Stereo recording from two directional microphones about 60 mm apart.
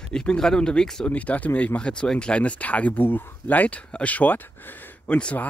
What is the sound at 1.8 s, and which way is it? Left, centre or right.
Speech, centre.